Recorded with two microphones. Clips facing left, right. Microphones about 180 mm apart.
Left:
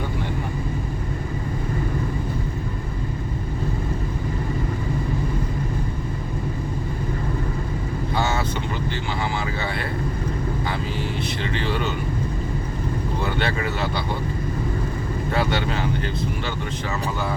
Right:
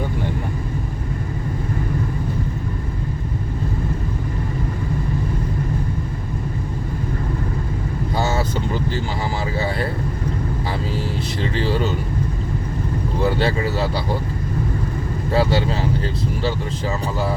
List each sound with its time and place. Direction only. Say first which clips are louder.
8.1 s vehicle: right 2 dB; 40° right (ahead or behind)
11.5 s vehicle: right 5 dB; 35° right (ahead or behind)
13.4 s a sound: right 4 dB; 35° right (ahead or behind)
15.3 s vehicle: right 5 dB; 30° right (ahead or behind)